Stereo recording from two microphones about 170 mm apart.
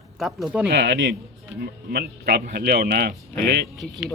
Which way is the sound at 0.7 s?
80° right.